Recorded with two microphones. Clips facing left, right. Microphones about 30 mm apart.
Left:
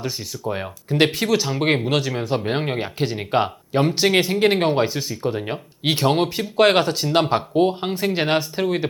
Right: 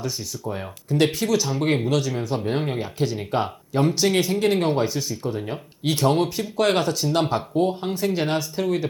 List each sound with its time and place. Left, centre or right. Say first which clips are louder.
0.0 s speech: left 2 dB; left